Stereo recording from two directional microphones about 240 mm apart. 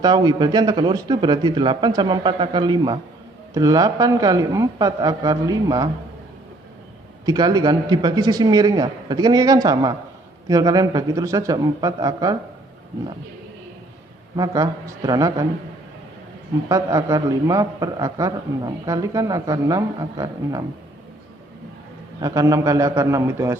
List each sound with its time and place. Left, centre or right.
0.0 s a man's voice: centre
7.3 s a man's voice: centre
14.3 s a man's voice: centre
16.6 s a man's voice: centre
22.2 s a man's voice: centre